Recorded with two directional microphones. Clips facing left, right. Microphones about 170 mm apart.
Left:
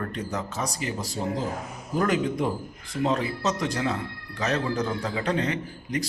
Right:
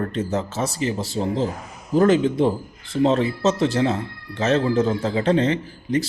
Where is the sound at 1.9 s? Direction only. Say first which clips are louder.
Right 8 dB; 30° right (ahead or behind).